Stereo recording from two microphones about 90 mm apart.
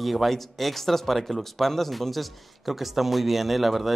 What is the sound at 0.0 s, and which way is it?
Speech, centre (ahead or behind).